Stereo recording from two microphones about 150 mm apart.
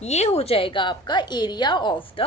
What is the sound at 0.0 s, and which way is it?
A woman's voice, 45° left (ahead or behind).